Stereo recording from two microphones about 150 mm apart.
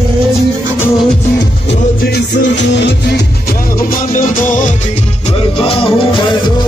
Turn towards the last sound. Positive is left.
turn(degrees=40)  # may be behind; listen again after turning